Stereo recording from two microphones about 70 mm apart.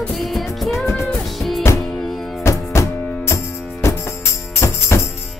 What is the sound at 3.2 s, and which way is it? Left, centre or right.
Music, left.